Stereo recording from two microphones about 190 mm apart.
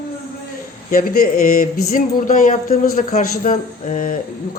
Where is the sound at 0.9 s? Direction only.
50° left (ahead or behind).